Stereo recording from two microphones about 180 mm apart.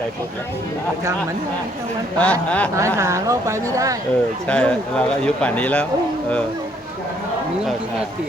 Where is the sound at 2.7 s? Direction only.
15° right (ahead or behind).